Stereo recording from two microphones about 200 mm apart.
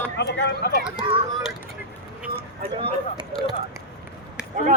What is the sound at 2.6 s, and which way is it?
Speech, 25° right (ahead or behind).